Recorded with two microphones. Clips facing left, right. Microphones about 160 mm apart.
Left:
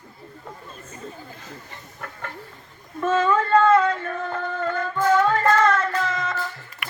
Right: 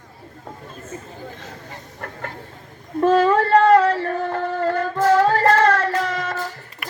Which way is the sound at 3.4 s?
35° right (ahead or behind).